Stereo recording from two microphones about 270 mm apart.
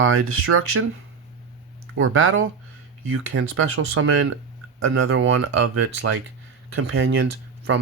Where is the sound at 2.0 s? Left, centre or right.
Right.